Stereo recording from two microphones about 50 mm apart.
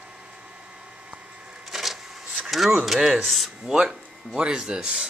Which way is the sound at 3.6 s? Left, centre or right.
Centre.